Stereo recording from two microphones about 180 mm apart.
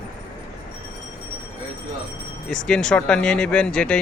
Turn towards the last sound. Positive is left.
turn(degrees=5)  # may be behind; listen again after turning